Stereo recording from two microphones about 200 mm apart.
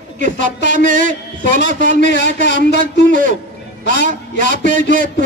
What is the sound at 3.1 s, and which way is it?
A man's voice, 40° right (ahead or behind).